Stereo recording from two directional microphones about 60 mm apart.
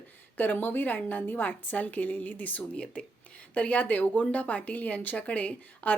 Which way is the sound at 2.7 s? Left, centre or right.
Centre.